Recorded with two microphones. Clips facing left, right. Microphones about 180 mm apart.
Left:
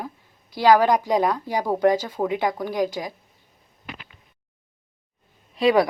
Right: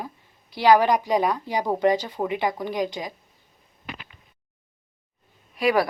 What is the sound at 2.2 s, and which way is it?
Speech, 5° left (ahead or behind).